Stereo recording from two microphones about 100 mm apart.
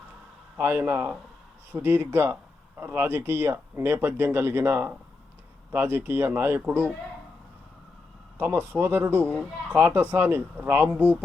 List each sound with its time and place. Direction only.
0.5 s speech: 20° right (ahead or behind)
8.4 s speech: 20° right (ahead or behind)
9.2 s speech: 15° left (ahead or behind)
9.7 s speech: 20° right (ahead or behind)